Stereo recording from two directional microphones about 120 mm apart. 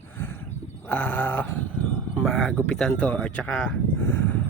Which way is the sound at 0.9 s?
15° left (ahead or behind).